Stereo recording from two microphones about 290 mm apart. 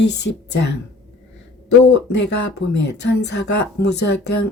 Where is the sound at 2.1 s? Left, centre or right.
Left.